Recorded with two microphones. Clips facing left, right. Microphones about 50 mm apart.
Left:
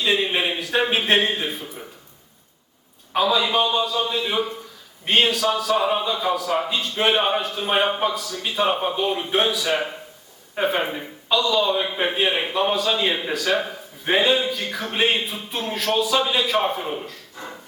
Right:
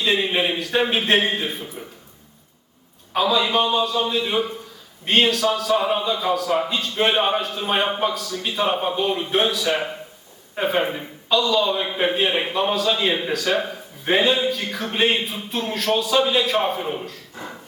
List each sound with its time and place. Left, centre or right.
0.0 s a man's voice: centre
1.5 s a man's voice: centre
3.1 s a man's voice: centre